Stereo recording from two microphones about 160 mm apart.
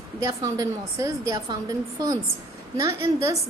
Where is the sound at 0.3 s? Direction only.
20° right (ahead or behind).